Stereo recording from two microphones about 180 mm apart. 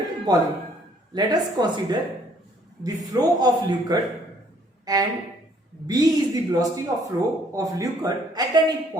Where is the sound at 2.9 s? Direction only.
20° right (ahead or behind).